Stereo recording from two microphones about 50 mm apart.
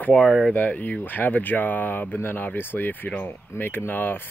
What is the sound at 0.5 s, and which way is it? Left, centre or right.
Speech, left.